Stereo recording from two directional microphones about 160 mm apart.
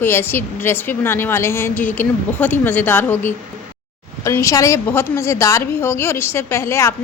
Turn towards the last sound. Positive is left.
turn(degrees=15)  # may be behind; listen again after turning